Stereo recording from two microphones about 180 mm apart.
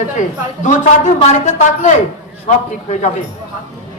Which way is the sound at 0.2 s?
40° left (ahead or behind).